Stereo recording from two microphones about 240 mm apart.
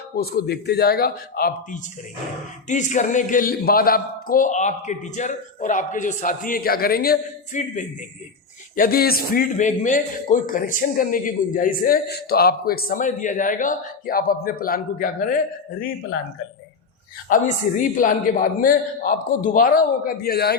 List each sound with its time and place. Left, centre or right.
0.2 s a man's voice: left
17.2 s a man's voice: left